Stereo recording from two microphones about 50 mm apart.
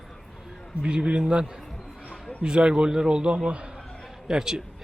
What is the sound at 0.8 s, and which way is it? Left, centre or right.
Speech, right.